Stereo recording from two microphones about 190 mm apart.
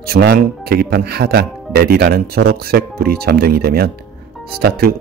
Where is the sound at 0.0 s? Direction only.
55° right (ahead or behind).